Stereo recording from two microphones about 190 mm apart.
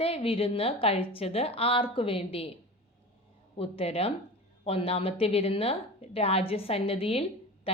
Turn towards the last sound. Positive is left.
turn(degrees=30)  # may be behind; listen again after turning